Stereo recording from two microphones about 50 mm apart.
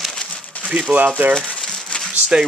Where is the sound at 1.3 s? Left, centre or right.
Centre.